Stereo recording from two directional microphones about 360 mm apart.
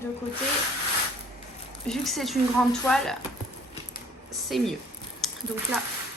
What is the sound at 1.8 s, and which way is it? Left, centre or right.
Speech, centre.